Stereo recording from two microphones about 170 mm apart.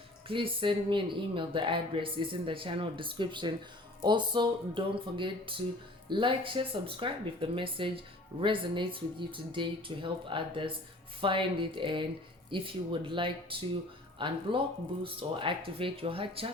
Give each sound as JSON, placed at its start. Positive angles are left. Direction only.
{"t": 0.3, "sound": "speech", "side_deg": -30}